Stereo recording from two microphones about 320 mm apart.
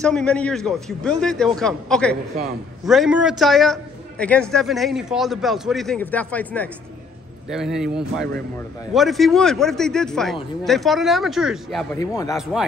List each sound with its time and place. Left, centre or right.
0.0 s a man's voice: centre
11.9 s speech: centre